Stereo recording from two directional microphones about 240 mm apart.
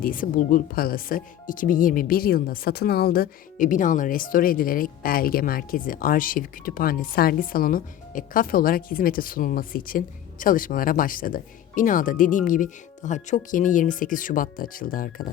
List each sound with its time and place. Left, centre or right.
0.0 s speech: left